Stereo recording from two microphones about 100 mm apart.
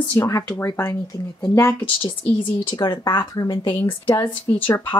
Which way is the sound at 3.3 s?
35° left (ahead or behind).